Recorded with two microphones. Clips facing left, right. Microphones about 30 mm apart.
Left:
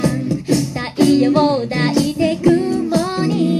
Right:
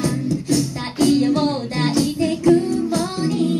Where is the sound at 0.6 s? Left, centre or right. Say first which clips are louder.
Left 3 dB; left.